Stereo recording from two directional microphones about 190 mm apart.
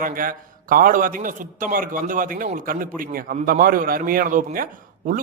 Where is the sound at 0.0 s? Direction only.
45° right (ahead or behind).